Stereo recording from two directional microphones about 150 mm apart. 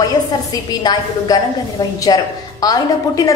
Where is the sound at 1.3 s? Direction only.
25° left (ahead or behind).